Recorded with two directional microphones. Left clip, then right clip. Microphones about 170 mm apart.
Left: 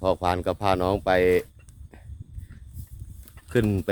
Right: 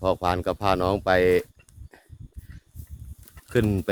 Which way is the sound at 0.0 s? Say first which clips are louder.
Even; centre (ahead or behind).